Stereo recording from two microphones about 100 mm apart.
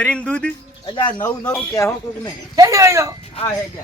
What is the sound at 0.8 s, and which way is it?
Speech, 50° left (ahead or behind).